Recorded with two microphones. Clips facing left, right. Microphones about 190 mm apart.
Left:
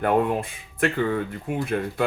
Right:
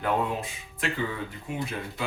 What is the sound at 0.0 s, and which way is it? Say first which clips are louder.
Speech: left 6 dB; 55° left (ahead or behind).